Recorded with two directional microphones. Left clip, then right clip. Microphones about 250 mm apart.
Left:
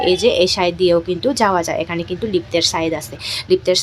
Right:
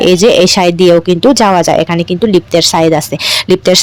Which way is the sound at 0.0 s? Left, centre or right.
Right.